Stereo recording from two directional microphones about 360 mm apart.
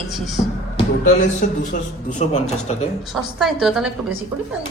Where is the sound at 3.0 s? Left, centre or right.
Centre.